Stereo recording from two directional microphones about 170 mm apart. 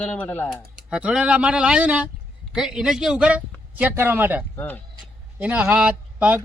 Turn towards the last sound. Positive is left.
turn(degrees=-10)  # may be behind; listen again after turning